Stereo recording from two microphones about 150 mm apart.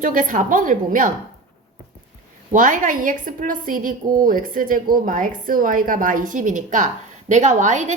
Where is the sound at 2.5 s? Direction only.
60° right (ahead or behind).